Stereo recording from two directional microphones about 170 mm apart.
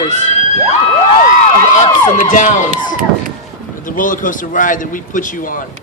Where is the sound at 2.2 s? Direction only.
45° left (ahead or behind).